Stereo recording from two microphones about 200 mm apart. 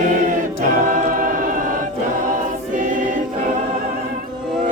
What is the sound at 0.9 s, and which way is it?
Music, 45° right (ahead or behind).